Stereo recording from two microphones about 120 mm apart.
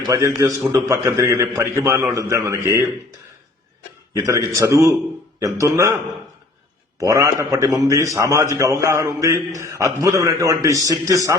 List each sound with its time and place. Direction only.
0.0 s a man's voice: 25° right (ahead or behind)
4.1 s a man's voice: 25° right (ahead or behind)
7.0 s a man's voice: 30° right (ahead or behind)